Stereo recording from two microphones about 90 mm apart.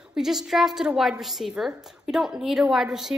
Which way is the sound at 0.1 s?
5° right (ahead or behind).